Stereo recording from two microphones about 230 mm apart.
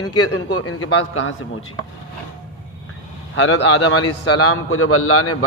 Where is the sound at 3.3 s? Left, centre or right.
Left.